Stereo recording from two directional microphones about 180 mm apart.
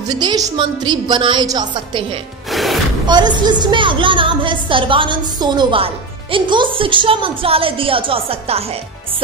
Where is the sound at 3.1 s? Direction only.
25° right (ahead or behind).